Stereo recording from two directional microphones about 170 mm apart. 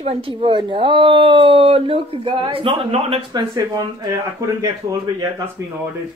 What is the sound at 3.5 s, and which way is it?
Speech, 20° right (ahead or behind).